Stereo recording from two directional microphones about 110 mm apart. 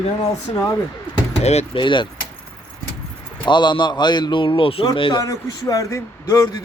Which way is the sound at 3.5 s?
45° left (ahead or behind).